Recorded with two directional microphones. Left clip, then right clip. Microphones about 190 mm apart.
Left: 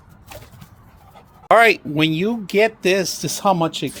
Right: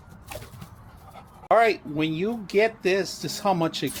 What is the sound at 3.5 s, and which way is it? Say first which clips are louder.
Speech: left 5 dB; 35° left (ahead or behind).